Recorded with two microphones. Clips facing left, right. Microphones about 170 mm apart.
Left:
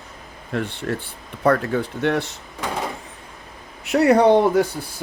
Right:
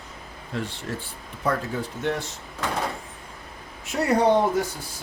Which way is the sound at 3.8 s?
65° left (ahead or behind).